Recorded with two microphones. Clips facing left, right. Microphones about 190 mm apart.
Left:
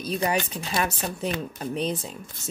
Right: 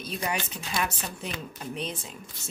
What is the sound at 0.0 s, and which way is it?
A woman's voice, 35° left (ahead or behind).